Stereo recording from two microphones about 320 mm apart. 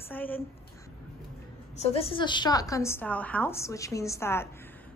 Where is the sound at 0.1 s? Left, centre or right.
Centre.